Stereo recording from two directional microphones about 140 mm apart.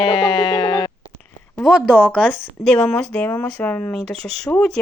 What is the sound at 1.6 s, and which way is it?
Speech, 5° right (ahead or behind).